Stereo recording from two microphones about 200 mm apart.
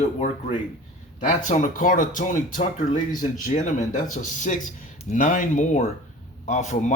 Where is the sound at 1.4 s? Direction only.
40° left (ahead or behind).